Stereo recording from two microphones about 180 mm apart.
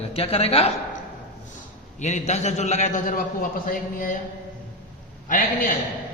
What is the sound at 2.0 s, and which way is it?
A man's voice, 40° left (ahead or behind).